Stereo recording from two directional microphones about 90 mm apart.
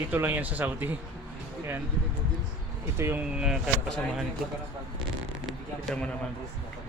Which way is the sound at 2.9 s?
30° right (ahead or behind).